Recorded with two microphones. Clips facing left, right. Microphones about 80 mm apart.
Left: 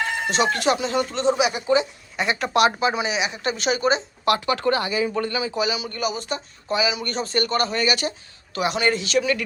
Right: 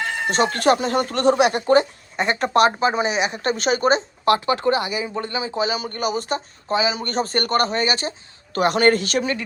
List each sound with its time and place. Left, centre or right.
0.3 s speech: right
2.1 s speech: right
4.3 s speech: right
8.5 s speech: right